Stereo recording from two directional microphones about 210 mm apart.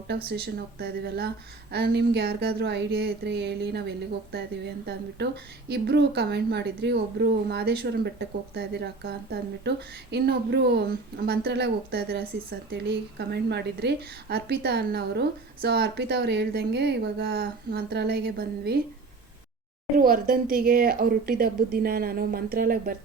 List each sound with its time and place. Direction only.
0.3 s speech: 50° right (ahead or behind)
20.0 s speech: 40° right (ahead or behind)